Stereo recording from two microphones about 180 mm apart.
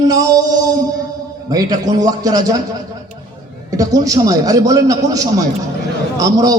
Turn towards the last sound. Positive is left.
turn(degrees=-20)  # may be behind; listen again after turning